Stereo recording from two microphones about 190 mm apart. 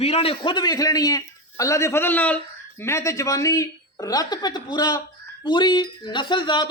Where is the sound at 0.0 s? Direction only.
30° left (ahead or behind).